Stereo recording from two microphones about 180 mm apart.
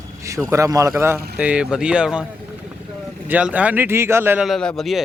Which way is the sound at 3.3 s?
10° right (ahead or behind).